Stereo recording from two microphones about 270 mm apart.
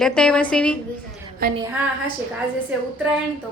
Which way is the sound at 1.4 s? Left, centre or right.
Right.